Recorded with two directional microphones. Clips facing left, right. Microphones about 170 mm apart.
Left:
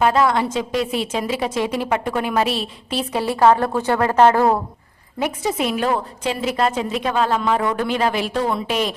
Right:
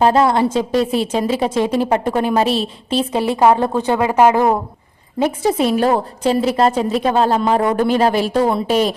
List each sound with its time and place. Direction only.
0.0 s a woman's voice: 30° right (ahead or behind); by 4.6 s 15° right (ahead or behind)
5.2 s a woman's voice: 30° right (ahead or behind)